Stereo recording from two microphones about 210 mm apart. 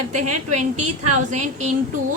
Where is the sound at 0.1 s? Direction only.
35° right (ahead or behind).